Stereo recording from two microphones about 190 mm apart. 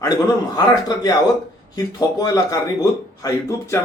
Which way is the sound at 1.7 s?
20° left (ahead or behind).